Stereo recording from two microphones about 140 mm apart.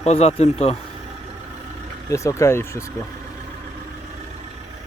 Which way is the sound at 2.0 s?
20° left (ahead or behind).